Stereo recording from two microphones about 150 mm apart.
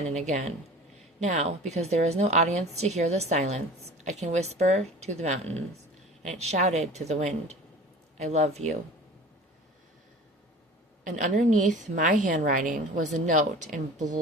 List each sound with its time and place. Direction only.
0.1 s a woman's voice: 50° right (ahead or behind)
11.0 s a woman's voice: 55° right (ahead or behind)